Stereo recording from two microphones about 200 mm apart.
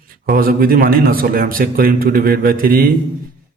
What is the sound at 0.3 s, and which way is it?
A man's voice, 45° right (ahead or behind).